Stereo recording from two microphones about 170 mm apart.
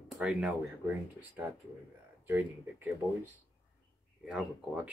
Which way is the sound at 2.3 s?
10° right (ahead or behind).